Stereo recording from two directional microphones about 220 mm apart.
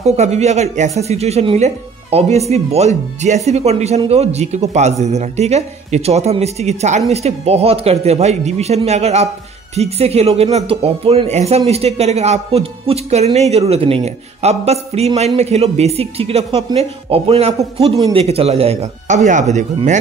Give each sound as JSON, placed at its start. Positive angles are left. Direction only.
{"t": 0.0, "sound": "a man's voice", "side_deg": -30}
{"t": 18.2, "sound": "speech", "side_deg": -30}